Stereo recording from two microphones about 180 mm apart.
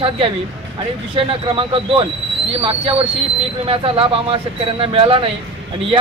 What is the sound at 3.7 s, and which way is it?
Speech, 30° right (ahead or behind).